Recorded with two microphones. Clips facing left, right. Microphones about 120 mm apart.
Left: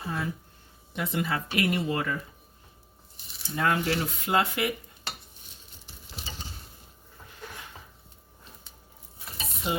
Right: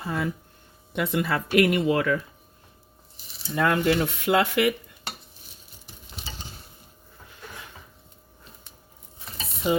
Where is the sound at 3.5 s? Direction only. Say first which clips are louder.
Right 4 dB; 65° right (ahead or behind); by 4.8 s 90° right.